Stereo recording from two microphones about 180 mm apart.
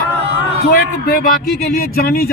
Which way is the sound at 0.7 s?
55° left (ahead or behind).